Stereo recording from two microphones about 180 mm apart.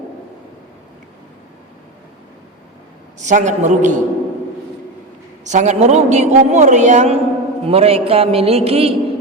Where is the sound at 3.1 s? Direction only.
40° right (ahead or behind).